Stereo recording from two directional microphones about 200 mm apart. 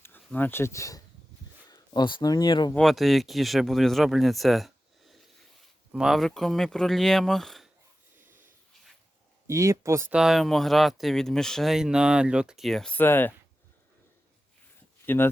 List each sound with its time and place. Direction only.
0.0 s speech: 10° left (ahead or behind)
2.7 s speech: centre (ahead or behind)
9.5 s speech: 15° right (ahead or behind); by 13.3 s 10° left (ahead or behind)
15.0 s speech: 10° left (ahead or behind)